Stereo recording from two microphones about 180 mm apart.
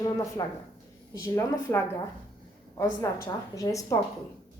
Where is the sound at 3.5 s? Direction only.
20° left (ahead or behind).